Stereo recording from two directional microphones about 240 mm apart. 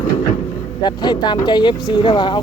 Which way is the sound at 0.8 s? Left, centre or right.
Centre.